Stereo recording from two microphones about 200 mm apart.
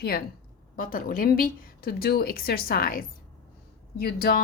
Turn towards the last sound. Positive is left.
turn(degrees=50)  # may be behind; listen again after turning